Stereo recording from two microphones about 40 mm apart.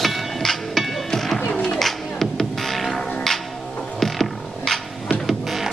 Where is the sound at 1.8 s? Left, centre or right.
Centre.